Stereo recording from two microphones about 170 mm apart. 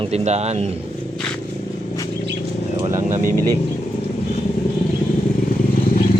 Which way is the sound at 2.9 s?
50° right (ahead or behind).